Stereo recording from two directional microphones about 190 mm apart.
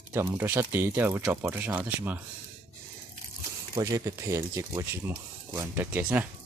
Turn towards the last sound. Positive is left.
turn(degrees=-10)  # may be behind; listen again after turning